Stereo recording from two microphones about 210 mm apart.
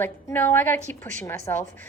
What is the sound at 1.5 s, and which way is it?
Speech, 15° left (ahead or behind).